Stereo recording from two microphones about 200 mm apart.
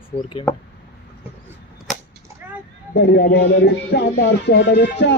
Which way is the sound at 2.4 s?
10° right (ahead or behind).